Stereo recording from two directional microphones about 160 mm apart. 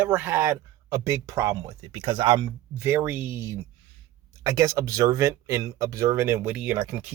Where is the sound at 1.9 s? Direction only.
35° right (ahead or behind); by 7.1 s 10° right (ahead or behind).